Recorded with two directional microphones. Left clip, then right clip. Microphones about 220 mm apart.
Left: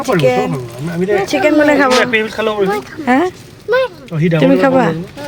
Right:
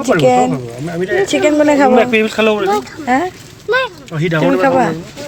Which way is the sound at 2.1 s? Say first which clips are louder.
Right 2 dB; 35° right (ahead or behind).